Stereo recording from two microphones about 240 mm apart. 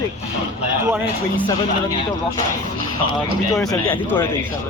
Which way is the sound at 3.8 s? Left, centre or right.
Centre.